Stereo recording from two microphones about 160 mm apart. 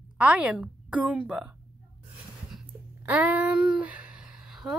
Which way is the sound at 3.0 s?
10° right (ahead or behind).